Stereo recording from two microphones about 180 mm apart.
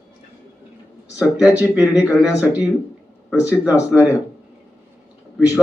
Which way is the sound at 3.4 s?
10° right (ahead or behind).